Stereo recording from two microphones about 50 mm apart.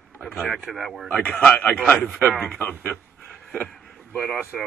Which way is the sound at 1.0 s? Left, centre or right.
Left.